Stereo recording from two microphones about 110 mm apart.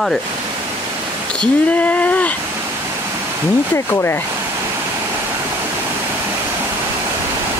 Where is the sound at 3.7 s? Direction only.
20° left (ahead or behind).